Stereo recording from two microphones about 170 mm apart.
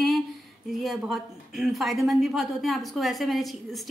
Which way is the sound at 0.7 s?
Centre (ahead or behind).